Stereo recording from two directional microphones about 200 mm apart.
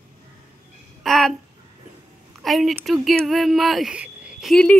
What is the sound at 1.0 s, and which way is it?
Speech, centre (ahead or behind).